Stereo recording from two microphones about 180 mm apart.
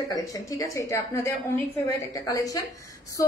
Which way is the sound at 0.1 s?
20° left (ahead or behind).